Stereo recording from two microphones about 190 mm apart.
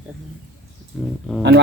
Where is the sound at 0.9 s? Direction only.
5° left (ahead or behind).